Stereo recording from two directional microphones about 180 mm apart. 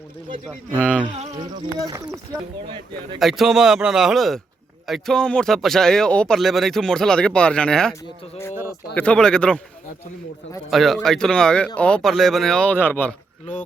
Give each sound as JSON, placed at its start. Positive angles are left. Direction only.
{"t": 0.7, "sound": "speech", "side_deg": 10}
{"t": 1.1, "sound": "a sound", "side_deg": -35}
{"t": 1.8, "sound": "speech", "side_deg": -20}
{"t": 2.6, "sound": "speech", "side_deg": -30}
{"t": 3.2, "sound": "speech", "side_deg": 0}
{"t": 9.0, "sound": "speech", "side_deg": 5}
{"t": 10.7, "sound": "speech", "side_deg": 0}